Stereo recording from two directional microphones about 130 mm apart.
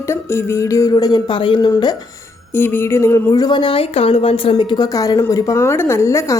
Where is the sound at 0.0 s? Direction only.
20° left (ahead or behind).